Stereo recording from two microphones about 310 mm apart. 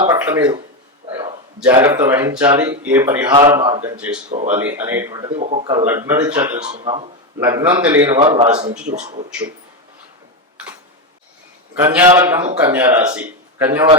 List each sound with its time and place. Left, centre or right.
0.1 s a man's voice: centre
4.4 s a man's voice: centre
5.4 s speech: right
5.7 s a man's voice: centre
6.7 s a man's voice: centre
11.8 s a man's voice: centre